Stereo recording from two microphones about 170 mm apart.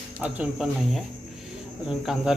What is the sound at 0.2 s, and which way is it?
Speech, 5° right (ahead or behind).